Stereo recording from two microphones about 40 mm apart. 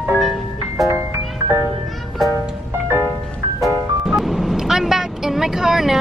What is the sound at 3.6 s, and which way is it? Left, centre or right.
Music, centre.